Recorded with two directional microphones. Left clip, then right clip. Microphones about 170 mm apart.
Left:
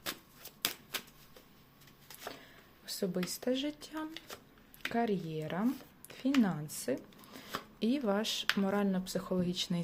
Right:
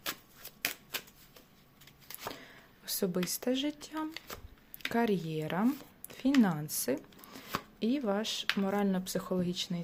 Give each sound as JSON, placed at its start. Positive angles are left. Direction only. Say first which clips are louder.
{"t": 0.6, "sound": "shuffling cards", "louder": "right 1 dB", "side_deg": -5}
{"t": 2.2, "sound": "zipper", "louder": "right 3 dB", "side_deg": -20}
{"t": 4.9, "sound": "speech", "louder": "right 3 dB", "side_deg": -15}
{"t": 8.9, "sound": "speech", "louder": "right 2 dB", "side_deg": -15}